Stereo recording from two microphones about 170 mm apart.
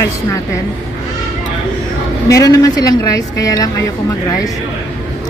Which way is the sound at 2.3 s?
20° left (ahead or behind).